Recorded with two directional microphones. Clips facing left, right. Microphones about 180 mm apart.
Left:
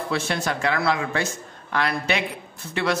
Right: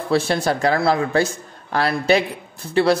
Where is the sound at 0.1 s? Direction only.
35° right (ahead or behind).